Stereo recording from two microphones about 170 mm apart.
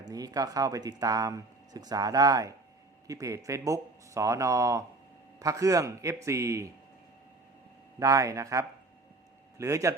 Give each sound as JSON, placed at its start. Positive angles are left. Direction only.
{"t": 0.0, "sound": "speech", "side_deg": -20}
{"t": 7.9, "sound": "speech", "side_deg": -20}